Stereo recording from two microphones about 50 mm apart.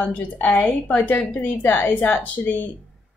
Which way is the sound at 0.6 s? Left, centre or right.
Left.